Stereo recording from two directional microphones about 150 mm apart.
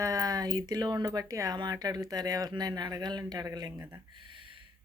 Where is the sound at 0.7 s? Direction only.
25° right (ahead or behind).